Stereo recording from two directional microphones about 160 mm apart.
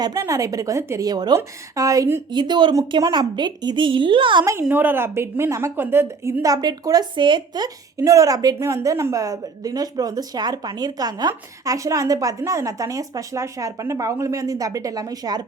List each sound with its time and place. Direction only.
0.0 s speech: 20° right (ahead or behind)
4.6 s speech: 10° right (ahead or behind)